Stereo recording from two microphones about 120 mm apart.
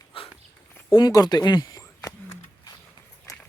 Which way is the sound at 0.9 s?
35° left (ahead or behind).